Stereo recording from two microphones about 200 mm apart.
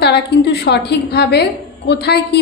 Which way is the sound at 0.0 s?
55° left (ahead or behind).